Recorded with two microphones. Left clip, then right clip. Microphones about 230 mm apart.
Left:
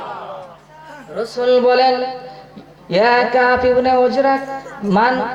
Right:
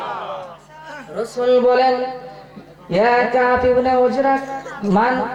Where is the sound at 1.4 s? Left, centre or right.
Centre.